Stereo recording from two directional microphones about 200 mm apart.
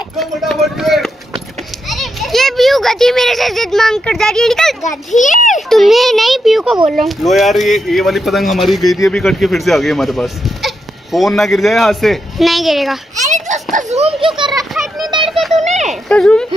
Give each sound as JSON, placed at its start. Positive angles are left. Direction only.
{"t": 0.2, "sound": "a child's voice", "side_deg": 0}
{"t": 5.2, "sound": "a child's voice", "side_deg": 40}
{"t": 5.7, "sound": "speech", "side_deg": 0}
{"t": 13.1, "sound": "a child's voice", "side_deg": -35}
{"t": 14.6, "sound": "a child's voice", "side_deg": 0}
{"t": 15.2, "sound": "a sound", "side_deg": 0}
{"t": 15.9, "sound": "speech", "side_deg": 5}